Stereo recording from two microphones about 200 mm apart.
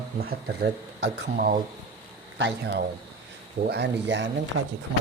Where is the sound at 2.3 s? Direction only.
60° right (ahead or behind).